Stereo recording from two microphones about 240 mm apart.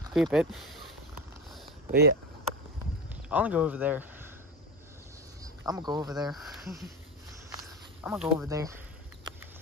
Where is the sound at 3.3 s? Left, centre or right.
Centre.